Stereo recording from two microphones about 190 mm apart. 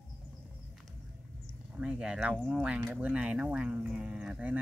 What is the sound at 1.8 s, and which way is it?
Speech, 5° right (ahead or behind).